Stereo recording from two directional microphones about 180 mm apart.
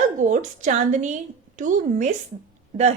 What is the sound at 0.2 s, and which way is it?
Speech, 45° right (ahead or behind).